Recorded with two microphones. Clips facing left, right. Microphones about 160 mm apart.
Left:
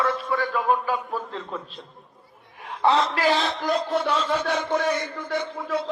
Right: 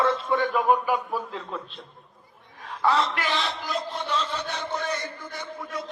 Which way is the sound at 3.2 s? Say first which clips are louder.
Left 6 dB; 45° left (ahead or behind).